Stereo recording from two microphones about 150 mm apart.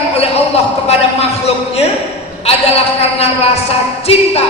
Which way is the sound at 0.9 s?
45° left (ahead or behind).